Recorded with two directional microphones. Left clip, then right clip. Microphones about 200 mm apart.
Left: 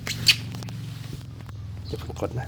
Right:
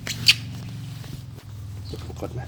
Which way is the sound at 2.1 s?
45° left (ahead or behind).